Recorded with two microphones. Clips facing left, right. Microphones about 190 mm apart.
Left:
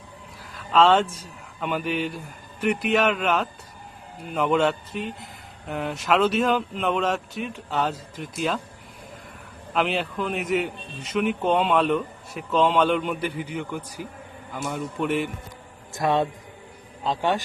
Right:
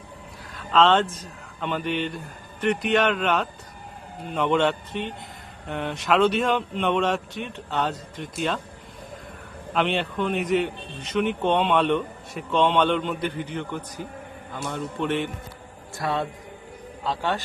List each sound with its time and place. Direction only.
0.5 s a man's voice: 5° left (ahead or behind)
9.7 s a man's voice: 5° left (ahead or behind)
16.0 s a man's voice: 20° left (ahead or behind)